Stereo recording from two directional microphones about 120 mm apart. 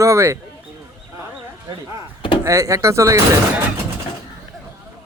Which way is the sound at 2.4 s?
25° right (ahead or behind).